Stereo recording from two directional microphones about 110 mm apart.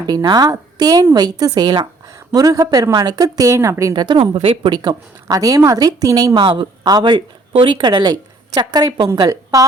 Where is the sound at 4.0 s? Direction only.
50° right (ahead or behind).